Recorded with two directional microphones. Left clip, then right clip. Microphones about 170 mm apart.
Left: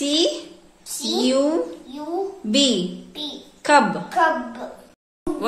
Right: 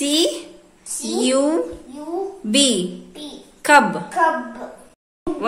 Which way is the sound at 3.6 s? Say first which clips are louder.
Right 3 dB; 15° right (ahead or behind).